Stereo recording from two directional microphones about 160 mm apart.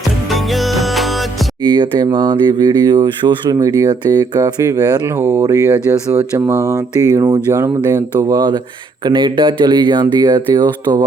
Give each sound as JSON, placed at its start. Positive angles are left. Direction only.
{"t": 0.3, "sound": "music", "side_deg": 0}
{"t": 1.6, "sound": "speech", "side_deg": -30}